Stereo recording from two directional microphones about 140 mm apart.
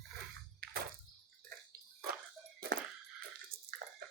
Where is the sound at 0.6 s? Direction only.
90° right.